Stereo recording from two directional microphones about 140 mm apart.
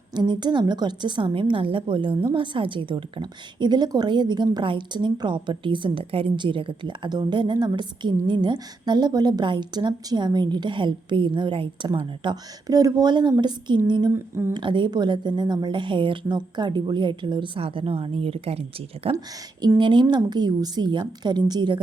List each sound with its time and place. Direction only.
0.1 s a woman's voice: 30° right (ahead or behind)
14.1 s a woman's voice: 15° right (ahead or behind)
14.5 s a woman's voice: 35° right (ahead or behind)
19.6 s a woman's voice: 30° right (ahead or behind)